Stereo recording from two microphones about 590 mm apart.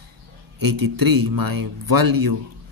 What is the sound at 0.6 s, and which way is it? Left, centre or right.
Speech, right.